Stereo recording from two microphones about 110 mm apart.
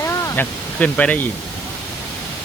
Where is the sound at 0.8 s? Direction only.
10° left (ahead or behind).